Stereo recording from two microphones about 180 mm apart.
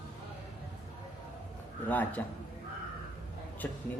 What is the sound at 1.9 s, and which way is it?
Speech, 10° left (ahead or behind).